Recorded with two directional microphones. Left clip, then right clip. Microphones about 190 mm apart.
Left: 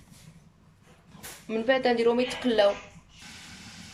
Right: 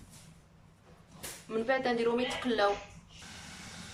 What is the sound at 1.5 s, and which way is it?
Speech, 30° left (ahead or behind).